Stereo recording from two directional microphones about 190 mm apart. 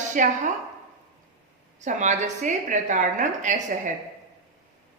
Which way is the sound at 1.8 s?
40° right (ahead or behind).